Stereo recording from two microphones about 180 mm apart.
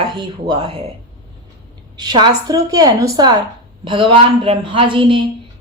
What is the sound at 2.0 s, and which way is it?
A woman's voice, 25° right (ahead or behind).